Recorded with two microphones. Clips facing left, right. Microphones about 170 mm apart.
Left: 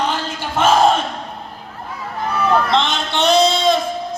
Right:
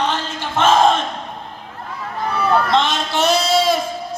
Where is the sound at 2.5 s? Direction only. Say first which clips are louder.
Right 1 dB; centre (ahead or behind).